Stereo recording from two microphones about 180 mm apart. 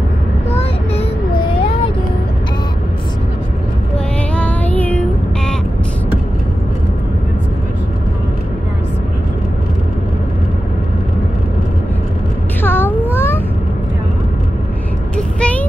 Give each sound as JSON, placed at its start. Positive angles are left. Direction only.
{"t": 0.5, "sound": "child singing", "side_deg": 35}
{"t": 4.4, "sound": "music", "side_deg": 10}
{"t": 12.6, "sound": "a sound", "side_deg": 10}
{"t": 15.1, "sound": "vehicle", "side_deg": 5}